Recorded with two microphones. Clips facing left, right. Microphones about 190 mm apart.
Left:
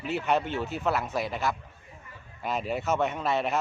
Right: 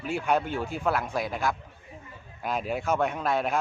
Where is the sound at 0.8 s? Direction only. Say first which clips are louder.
Right 1 dB; 5° left (ahead or behind).